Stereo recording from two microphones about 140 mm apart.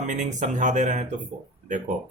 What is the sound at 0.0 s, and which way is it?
Speech, 60° right (ahead or behind).